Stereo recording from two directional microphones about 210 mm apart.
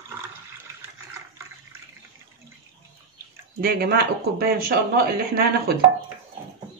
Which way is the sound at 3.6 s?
45° right (ahead or behind).